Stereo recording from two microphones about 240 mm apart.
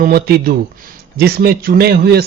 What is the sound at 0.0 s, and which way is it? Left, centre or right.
Speech, right.